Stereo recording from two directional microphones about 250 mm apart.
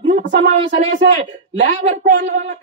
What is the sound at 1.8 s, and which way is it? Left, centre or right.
Speech, right.